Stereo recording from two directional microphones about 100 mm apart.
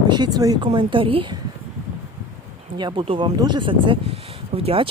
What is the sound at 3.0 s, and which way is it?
Speech, 65° right (ahead or behind).